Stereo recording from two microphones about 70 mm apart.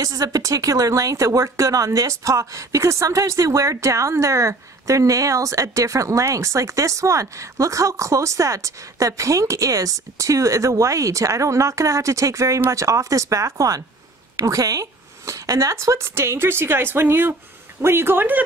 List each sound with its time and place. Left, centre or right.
0.0 s speech: right